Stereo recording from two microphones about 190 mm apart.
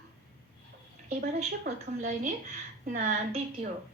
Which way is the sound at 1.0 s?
40° right (ahead or behind).